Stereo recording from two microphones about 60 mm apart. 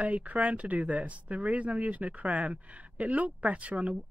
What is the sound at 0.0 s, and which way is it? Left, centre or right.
Speech, right.